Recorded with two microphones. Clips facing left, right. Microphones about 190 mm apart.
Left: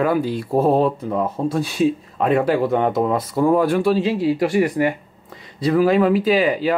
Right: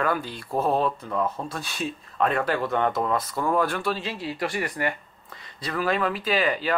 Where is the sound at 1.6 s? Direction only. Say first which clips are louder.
Left 13 dB; 5° left (ahead or behind).